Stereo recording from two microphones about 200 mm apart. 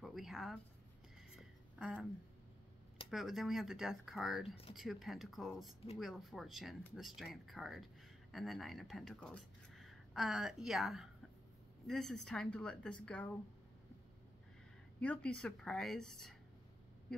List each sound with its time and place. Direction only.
0.0 s a sound: centre (ahead or behind)
1.8 s speech: centre (ahead or behind)
3.1 s speech: centre (ahead or behind)
15.0 s speech: 5° left (ahead or behind)